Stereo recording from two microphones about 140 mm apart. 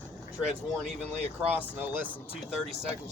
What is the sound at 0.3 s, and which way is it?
Speech, 5° right (ahead or behind).